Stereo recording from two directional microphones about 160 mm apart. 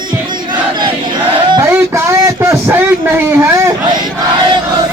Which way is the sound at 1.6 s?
15° right (ahead or behind).